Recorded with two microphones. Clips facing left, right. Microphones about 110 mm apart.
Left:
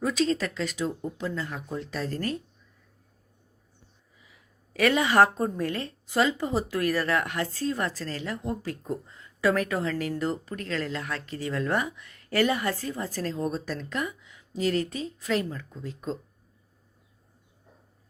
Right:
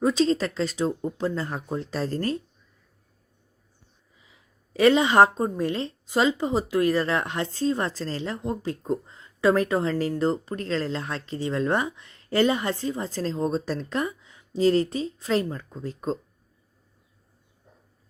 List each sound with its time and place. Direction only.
0.0 s speech: 30° right (ahead or behind)
4.2 s a woman's voice: 25° right (ahead or behind)